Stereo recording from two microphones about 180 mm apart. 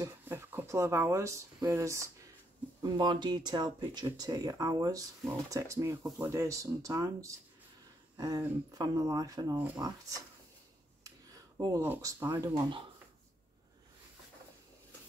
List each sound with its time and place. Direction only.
0.0 s speech: 15° right (ahead or behind)